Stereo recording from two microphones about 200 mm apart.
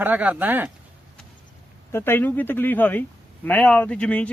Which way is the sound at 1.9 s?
10° left (ahead or behind).